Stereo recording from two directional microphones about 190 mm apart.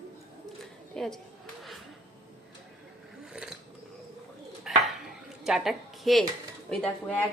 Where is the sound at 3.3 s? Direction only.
5° right (ahead or behind).